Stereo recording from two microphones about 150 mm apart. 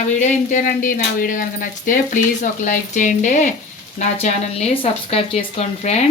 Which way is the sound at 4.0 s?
45° left (ahead or behind).